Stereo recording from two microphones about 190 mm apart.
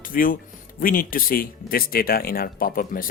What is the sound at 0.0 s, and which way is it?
Speech, 45° left (ahead or behind).